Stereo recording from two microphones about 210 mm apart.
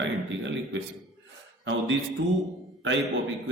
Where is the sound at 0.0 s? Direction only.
60° right (ahead or behind).